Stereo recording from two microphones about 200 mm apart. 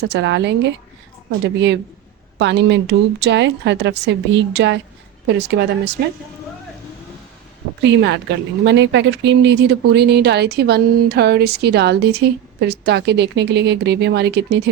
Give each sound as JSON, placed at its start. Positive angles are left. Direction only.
{"t": 0.0, "sound": "speech", "side_deg": -60}
{"t": 7.8, "sound": "speech", "side_deg": -60}